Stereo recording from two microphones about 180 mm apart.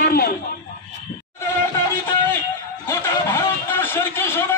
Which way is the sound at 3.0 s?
10° left (ahead or behind).